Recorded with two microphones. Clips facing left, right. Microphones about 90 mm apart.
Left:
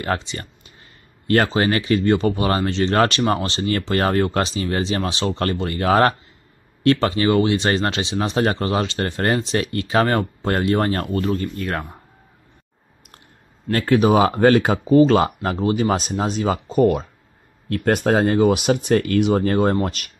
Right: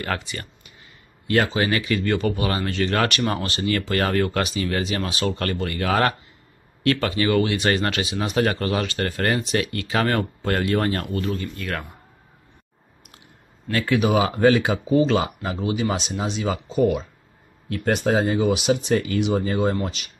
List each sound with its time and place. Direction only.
0.0 s speech: 25° left (ahead or behind)
1.2 s speech: 45° left (ahead or behind)
13.7 s speech: 40° left (ahead or behind)